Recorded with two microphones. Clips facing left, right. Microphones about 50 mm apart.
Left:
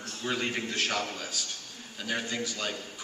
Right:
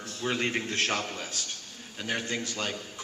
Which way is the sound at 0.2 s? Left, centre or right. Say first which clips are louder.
Right 2 dB; right.